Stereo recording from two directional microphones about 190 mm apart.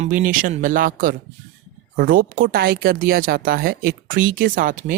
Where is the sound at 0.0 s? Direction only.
45° right (ahead or behind).